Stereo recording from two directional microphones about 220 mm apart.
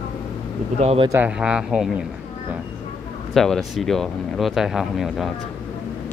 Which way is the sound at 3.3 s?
Centre (ahead or behind).